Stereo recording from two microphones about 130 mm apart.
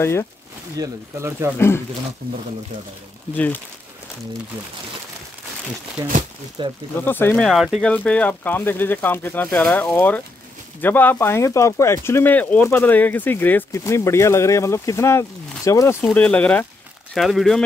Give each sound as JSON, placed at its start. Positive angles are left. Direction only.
{"t": 0.0, "sound": "speech", "side_deg": 20}
{"t": 0.7, "sound": "speech", "side_deg": -20}
{"t": 3.3, "sound": "speech", "side_deg": 10}
{"t": 6.0, "sound": "speech", "side_deg": -25}
{"t": 6.6, "sound": "speech", "side_deg": -40}
{"t": 7.1, "sound": "speech", "side_deg": 15}
{"t": 7.4, "sound": "speech", "side_deg": -5}
{"t": 7.8, "sound": "speech", "side_deg": 10}
{"t": 16.0, "sound": "speech", "side_deg": 5}